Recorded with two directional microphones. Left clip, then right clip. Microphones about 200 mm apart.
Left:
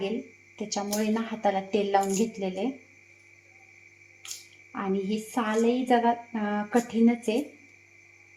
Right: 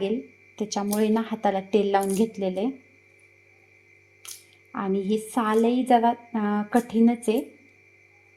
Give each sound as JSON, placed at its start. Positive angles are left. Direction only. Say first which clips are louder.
{"t": 0.5, "sound": "a woman's voice", "louder": "right 3 dB", "side_deg": -50}
{"t": 4.7, "sound": "a woman's voice", "louder": "right 4 dB", "side_deg": -50}